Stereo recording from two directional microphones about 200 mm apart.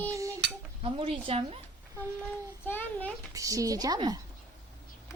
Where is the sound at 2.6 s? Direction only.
10° left (ahead or behind).